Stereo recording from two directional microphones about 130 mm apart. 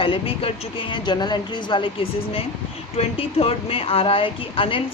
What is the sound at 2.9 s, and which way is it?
Speech, 50° left (ahead or behind).